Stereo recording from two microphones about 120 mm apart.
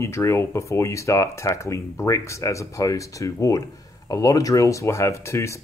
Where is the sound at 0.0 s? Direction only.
25° left (ahead or behind).